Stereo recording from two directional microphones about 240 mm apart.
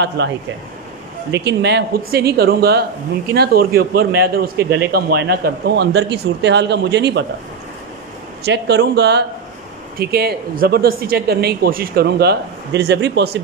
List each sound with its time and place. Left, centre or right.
0.2 s a man's voice: right
8.5 s a man's voice: right